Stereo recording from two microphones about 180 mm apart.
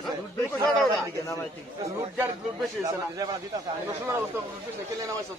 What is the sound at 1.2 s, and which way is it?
Speech, 15° left (ahead or behind).